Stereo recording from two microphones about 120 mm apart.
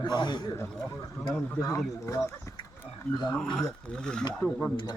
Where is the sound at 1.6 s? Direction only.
25° left (ahead or behind).